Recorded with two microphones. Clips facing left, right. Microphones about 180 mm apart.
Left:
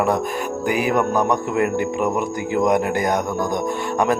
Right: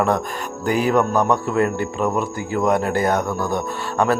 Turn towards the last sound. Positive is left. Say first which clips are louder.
# even
turn(degrees=15)  # may be behind; listen again after turning